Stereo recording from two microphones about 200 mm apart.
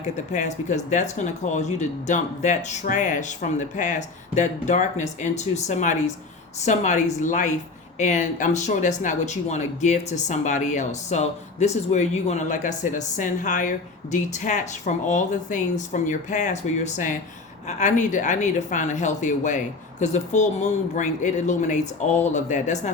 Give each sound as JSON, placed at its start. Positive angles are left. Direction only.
{"t": 0.3, "sound": "speech", "side_deg": 40}